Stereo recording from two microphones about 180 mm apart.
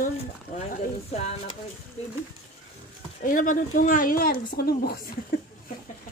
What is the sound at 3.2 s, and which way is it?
Speech, 50° left (ahead or behind).